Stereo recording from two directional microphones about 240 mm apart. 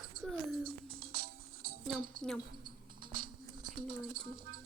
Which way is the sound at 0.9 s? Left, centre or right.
Right.